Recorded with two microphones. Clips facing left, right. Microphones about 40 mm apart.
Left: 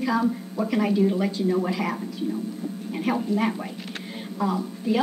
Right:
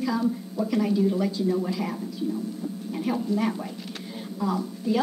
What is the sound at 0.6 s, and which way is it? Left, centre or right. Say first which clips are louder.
A woman's voice: left 2 dB; left.